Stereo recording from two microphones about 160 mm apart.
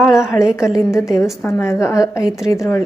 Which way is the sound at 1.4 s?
15° left (ahead or behind).